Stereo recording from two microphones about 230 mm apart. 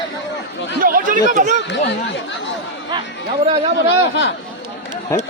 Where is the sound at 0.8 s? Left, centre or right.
Right.